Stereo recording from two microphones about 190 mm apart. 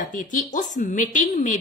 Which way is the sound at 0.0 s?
45° left (ahead or behind).